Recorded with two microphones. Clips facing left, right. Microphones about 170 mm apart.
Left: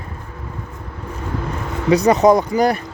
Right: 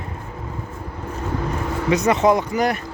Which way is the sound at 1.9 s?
35° left (ahead or behind).